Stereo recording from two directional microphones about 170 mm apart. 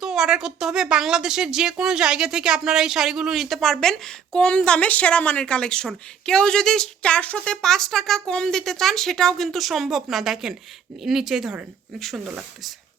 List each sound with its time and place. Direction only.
0.0 s speech: 5° right (ahead or behind)